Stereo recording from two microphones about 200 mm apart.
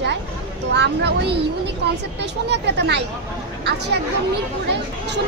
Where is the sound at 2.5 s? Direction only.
55° right (ahead or behind).